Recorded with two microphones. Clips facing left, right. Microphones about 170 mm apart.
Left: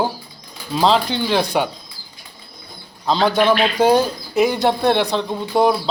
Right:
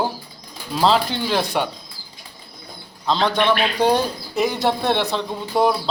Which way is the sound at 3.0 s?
5° left (ahead or behind).